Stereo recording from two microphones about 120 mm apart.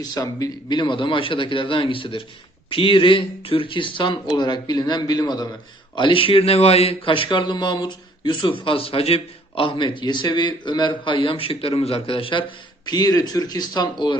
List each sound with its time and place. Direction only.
0.0 s speech: 30° left (ahead or behind)
6.0 s speech: 45° left (ahead or behind)